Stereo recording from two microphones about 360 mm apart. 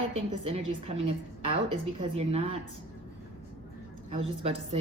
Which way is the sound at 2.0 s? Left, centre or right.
Centre.